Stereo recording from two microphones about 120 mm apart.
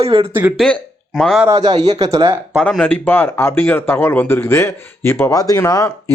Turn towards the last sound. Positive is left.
turn(degrees=25)  # may be behind; listen again after turning